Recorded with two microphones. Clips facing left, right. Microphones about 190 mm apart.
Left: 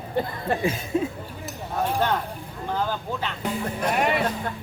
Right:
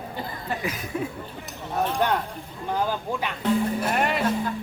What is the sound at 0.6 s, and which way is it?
Speech, 25° left (ahead or behind).